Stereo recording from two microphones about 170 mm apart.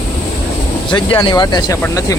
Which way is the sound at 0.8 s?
30° left (ahead or behind).